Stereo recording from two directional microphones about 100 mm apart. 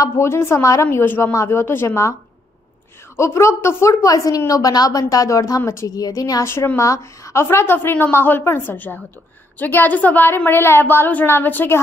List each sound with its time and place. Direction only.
0.0 s a woman's voice: 25° left (ahead or behind)
0.8 s a woman's voice: 20° left (ahead or behind)
3.2 s a woman's voice: 30° left (ahead or behind)
6.4 s a woman's voice: 25° left (ahead or behind)